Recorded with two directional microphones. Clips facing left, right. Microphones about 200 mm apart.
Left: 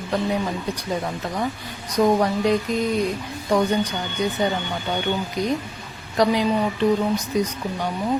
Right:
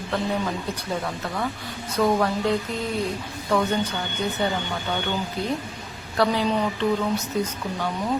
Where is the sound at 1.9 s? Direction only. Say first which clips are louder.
Left 3 dB; 15° left (ahead or behind).